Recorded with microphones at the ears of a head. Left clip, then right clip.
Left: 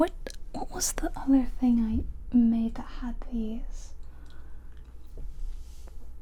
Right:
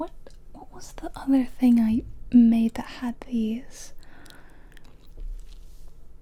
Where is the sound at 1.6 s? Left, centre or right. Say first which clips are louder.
Right 6 dB; right.